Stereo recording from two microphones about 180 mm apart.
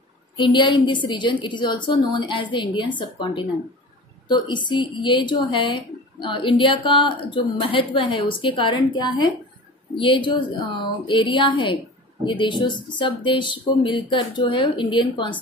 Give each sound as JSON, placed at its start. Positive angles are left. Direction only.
{"t": 0.4, "sound": "a woman's voice", "side_deg": 25}